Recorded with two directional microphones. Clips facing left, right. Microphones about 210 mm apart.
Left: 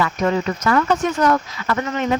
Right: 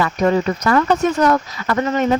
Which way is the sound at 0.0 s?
35° right (ahead or behind).